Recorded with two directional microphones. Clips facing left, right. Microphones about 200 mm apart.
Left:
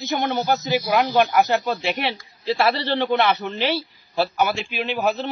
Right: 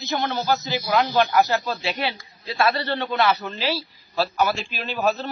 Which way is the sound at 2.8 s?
25° left (ahead or behind).